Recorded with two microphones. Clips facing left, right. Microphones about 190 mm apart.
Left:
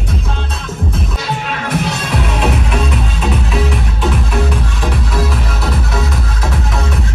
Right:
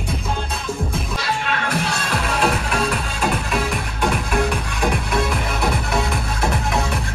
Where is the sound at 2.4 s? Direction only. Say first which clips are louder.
Left 2 dB; centre (ahead or behind).